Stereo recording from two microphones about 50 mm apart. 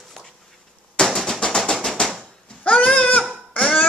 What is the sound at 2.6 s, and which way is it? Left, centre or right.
Goat, left.